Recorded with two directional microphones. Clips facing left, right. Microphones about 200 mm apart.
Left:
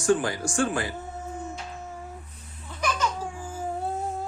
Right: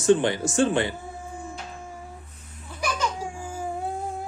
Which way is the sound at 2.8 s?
10° right (ahead or behind).